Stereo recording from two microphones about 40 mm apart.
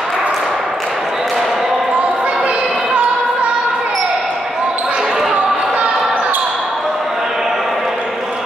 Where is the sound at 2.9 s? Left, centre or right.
Right.